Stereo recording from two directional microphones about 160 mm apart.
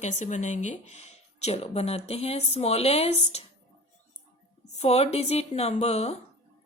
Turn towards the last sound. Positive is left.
turn(degrees=45)  # may be behind; listen again after turning